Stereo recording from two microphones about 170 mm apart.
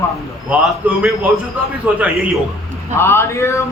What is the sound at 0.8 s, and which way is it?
A man's voice, 10° right (ahead or behind).